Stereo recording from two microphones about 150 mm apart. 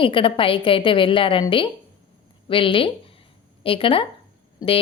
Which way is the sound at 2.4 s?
35° left (ahead or behind).